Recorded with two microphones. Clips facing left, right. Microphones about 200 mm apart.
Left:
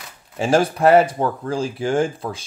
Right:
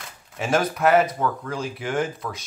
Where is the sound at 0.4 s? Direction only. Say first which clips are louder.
Left 5 dB; 30° left (ahead or behind).